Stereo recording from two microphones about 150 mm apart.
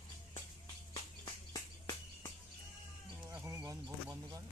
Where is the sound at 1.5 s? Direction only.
25° left (ahead or behind).